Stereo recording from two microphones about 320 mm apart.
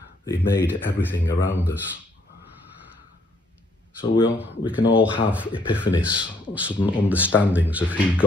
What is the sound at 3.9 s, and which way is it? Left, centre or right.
Speech, centre.